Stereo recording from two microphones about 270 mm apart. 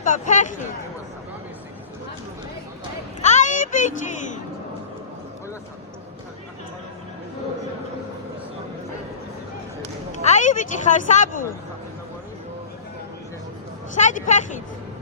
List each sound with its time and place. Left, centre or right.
0.0 s speech: left
3.2 s a sound: left
10.2 s a woman's voice: left
13.9 s speech: left